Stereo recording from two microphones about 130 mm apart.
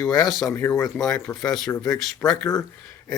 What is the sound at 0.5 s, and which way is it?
Speech, 20° left (ahead or behind).